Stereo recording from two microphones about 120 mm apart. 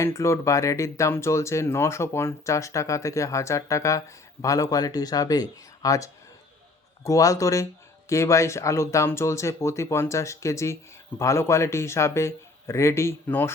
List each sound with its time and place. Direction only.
0.0 s speech: 25° left (ahead or behind)